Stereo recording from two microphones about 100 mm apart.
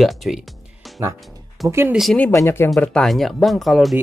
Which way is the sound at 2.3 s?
30° left (ahead or behind).